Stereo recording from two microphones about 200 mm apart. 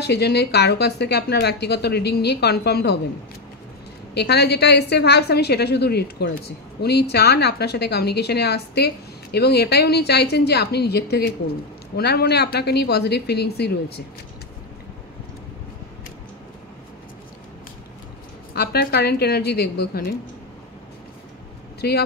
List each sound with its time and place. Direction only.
0.0 s a woman's voice: 55° left (ahead or behind)
4.1 s a woman's voice: 55° left (ahead or behind)
18.5 s a woman's voice: 50° left (ahead or behind)
21.8 s a woman's voice: 55° left (ahead or behind)